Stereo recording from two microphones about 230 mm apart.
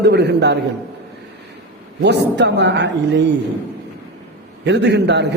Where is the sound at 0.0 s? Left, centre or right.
Right.